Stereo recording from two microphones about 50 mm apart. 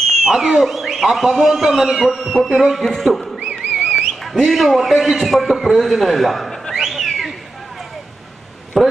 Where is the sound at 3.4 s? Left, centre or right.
Centre.